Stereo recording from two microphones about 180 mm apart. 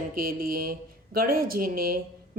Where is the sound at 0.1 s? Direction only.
55° right (ahead or behind).